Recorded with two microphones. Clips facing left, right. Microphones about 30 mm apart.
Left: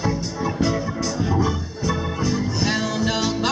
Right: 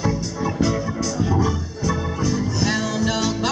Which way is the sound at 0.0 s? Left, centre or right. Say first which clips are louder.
Right 1 dB; centre.